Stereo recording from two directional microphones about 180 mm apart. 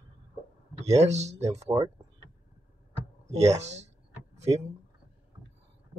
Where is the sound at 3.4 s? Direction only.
35° right (ahead or behind).